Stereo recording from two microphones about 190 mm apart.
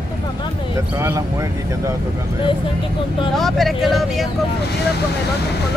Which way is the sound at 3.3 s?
Centre (ahead or behind).